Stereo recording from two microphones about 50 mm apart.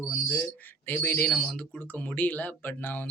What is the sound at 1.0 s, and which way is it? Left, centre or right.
Speech, left.